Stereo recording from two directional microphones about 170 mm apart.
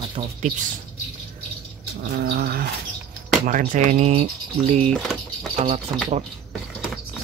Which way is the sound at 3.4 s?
50° right (ahead or behind).